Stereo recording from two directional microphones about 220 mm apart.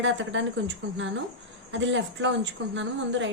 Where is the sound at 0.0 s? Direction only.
55° right (ahead or behind).